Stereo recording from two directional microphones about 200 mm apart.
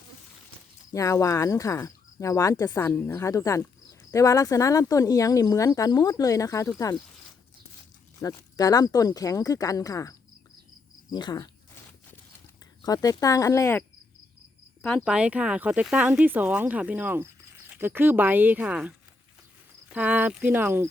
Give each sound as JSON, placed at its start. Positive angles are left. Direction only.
{"t": 0.9, "sound": "speech", "side_deg": 15}
{"t": 8.2, "sound": "speech", "side_deg": 15}
{"t": 12.8, "sound": "speech", "side_deg": 20}